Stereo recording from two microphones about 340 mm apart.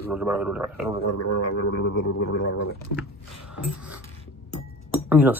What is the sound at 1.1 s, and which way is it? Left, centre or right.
Speech, left.